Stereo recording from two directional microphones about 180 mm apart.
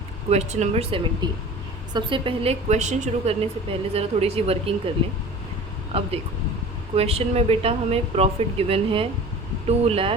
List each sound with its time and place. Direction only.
0.3 s a woman's voice: 40° right (ahead or behind)
5.9 s a woman's voice: 35° right (ahead or behind)